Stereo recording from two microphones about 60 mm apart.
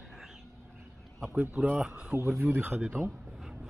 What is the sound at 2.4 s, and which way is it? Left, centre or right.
Speech, right.